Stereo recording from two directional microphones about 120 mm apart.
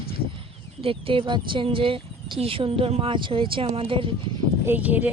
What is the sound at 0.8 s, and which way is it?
Speech, 50° right (ahead or behind).